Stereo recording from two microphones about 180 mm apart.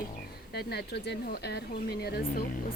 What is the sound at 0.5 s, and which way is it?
Speech, 65° left (ahead or behind).